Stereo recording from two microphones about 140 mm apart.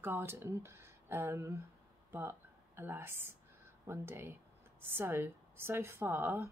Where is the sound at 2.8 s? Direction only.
15° right (ahead or behind).